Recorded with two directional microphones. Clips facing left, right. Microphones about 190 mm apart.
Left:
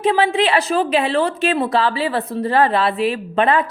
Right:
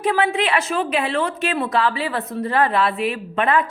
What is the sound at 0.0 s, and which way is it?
A woman's voice, 25° left (ahead or behind).